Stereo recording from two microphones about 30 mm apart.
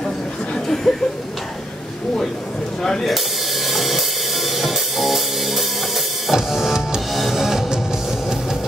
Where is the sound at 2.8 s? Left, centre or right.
Centre.